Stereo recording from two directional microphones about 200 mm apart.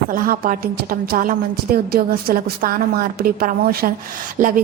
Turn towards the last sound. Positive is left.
turn(degrees=-45)  # may be behind; listen again after turning